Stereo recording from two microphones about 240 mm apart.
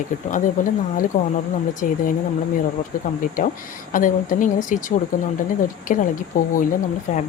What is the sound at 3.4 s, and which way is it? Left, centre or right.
Speech, left.